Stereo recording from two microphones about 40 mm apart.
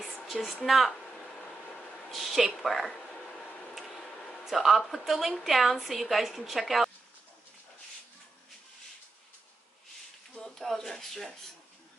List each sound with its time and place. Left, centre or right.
0.3 s a woman's voice: centre
1.1 s a sound: centre
2.0 s a woman's voice: centre
3.5 s tick-tock: centre
4.5 s a woman's voice: centre
10.4 s a sound: centre